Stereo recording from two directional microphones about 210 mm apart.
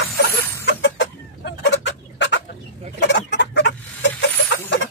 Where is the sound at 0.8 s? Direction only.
55° left (ahead or behind).